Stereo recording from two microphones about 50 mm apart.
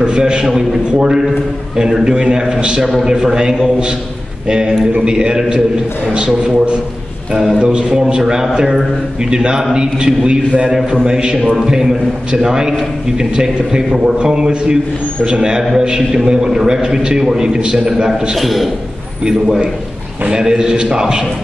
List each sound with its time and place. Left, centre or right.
0.0 s a man's voice: centre
18.3 s a man's voice: centre
20.2 s a man's voice: centre